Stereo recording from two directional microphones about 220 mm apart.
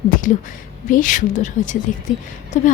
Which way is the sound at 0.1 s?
35° left (ahead or behind).